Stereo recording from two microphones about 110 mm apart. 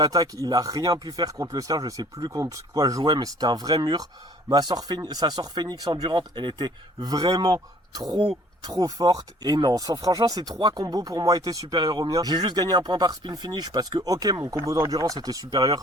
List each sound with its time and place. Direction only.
0.0 s speech: 35° right (ahead or behind)